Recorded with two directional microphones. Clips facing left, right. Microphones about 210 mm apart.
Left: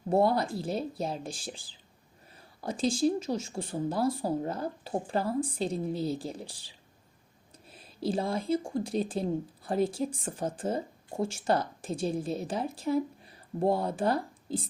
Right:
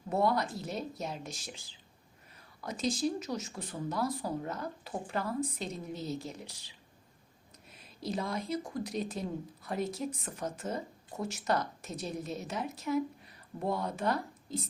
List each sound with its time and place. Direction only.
0.1 s speech: 30° left (ahead or behind)